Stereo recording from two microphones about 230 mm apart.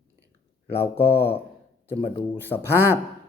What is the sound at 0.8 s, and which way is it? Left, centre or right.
Speech, centre.